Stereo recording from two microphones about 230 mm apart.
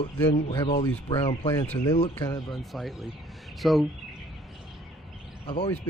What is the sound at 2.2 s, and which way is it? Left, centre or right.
Speech, centre.